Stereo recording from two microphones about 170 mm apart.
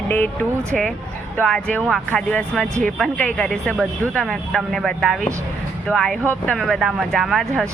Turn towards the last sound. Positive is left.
turn(degrees=0)  # may be behind; listen again after turning